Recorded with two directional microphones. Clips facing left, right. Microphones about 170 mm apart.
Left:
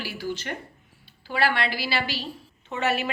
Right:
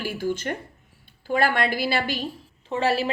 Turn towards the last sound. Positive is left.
turn(degrees=-30)  # may be behind; listen again after turning